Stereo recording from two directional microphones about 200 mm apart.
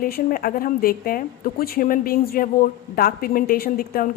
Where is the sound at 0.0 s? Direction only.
45° left (ahead or behind).